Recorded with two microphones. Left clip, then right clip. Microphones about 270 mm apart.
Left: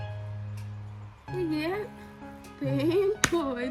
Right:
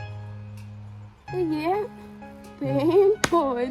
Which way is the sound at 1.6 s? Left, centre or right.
Right.